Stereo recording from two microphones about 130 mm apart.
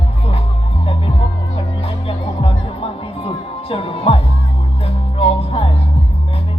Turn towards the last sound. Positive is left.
turn(degrees=45)  # may be behind; listen again after turning